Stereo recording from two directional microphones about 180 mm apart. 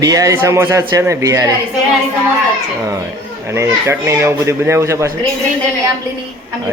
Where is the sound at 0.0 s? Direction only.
20° right (ahead or behind).